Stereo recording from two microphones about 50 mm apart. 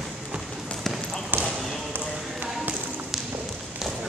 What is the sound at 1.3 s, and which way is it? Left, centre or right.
Basketball bounce, right.